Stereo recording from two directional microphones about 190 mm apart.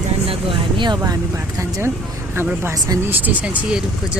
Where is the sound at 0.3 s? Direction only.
30° right (ahead or behind).